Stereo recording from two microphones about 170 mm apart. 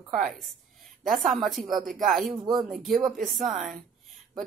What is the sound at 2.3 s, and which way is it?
Speech, 20° right (ahead or behind).